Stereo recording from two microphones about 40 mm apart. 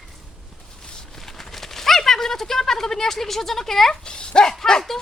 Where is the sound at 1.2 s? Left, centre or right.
Centre.